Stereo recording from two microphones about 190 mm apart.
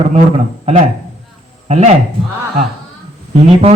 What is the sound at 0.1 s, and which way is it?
A man's voice, 30° right (ahead or behind).